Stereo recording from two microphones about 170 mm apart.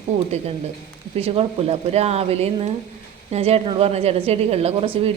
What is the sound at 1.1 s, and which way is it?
A woman's voice, 35° right (ahead or behind).